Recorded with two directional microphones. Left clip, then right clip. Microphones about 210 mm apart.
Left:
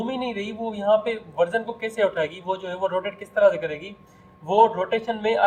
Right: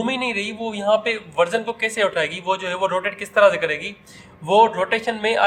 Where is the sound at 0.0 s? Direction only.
45° right (ahead or behind).